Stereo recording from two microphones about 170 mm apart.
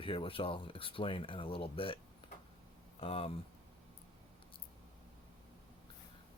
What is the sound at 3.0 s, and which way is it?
Speech, 35° left (ahead or behind).